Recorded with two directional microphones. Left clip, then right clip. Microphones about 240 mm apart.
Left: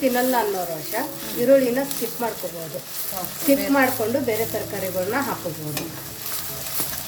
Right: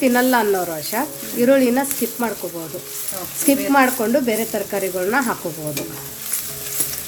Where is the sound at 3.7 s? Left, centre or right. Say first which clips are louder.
Right 4 dB; right.